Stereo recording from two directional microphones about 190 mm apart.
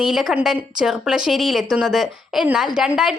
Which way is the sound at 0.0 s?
Centre (ahead or behind).